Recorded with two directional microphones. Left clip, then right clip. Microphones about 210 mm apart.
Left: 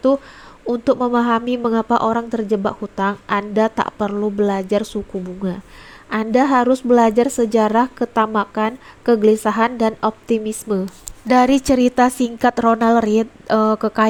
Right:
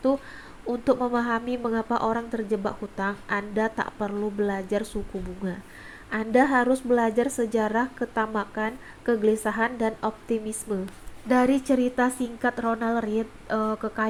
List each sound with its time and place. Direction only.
0.7 s a woman's voice: 30° left (ahead or behind)